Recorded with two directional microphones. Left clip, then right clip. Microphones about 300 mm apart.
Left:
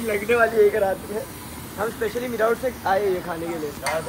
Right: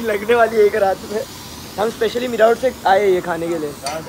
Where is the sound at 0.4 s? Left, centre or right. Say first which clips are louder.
Right 3 dB; right.